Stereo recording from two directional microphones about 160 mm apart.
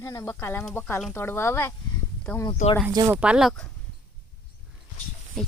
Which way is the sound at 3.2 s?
5° right (ahead or behind).